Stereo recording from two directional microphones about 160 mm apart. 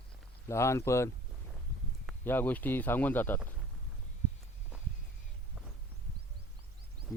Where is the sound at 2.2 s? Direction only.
10° left (ahead or behind).